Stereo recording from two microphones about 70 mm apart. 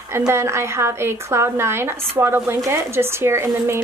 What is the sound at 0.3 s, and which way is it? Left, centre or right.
Speech, right.